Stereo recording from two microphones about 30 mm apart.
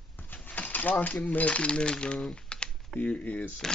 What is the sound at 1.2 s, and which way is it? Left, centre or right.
Coin, left.